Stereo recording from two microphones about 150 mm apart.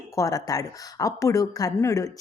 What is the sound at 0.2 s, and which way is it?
A woman's voice, 25° left (ahead or behind).